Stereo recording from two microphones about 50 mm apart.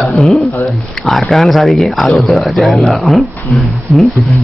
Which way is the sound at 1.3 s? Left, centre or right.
Centre.